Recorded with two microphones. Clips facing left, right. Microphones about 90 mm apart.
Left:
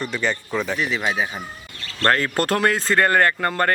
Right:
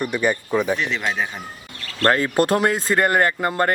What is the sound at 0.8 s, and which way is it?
Speech, 5° left (ahead or behind).